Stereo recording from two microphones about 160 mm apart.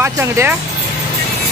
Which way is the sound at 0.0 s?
15° right (ahead or behind).